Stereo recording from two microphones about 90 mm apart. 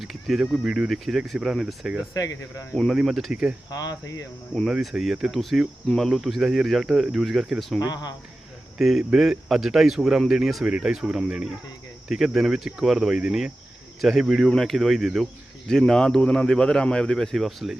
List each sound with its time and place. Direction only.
0.0 s speech: centre (ahead or behind)
2.1 s speech: 40° left (ahead or behind)
2.9 s speech: 5° right (ahead or behind)
3.7 s speech: 45° left (ahead or behind)
4.6 s speech: centre (ahead or behind)
8.8 s speech: 5° right (ahead or behind)